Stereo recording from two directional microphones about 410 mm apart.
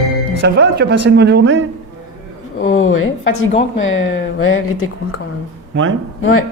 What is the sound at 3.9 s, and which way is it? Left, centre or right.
Speech, left.